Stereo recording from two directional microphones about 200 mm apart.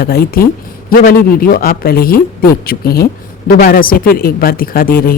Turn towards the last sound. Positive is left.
turn(degrees=45)  # may be behind; listen again after turning